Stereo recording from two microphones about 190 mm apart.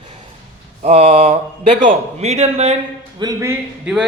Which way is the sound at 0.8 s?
35° right (ahead or behind).